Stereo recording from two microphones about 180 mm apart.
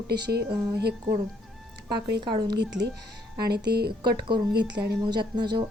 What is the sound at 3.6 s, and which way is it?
Speech, 65° right (ahead or behind).